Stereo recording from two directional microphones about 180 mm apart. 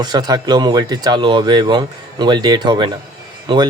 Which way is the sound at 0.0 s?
25° right (ahead or behind).